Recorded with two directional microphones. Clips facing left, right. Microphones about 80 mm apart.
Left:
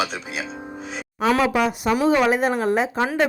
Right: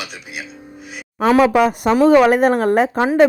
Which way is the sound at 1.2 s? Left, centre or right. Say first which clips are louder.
Right 6 dB; right.